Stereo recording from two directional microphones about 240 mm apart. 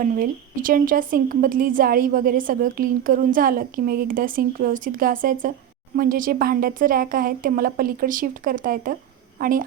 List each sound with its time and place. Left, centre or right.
0.0 s a woman's voice: right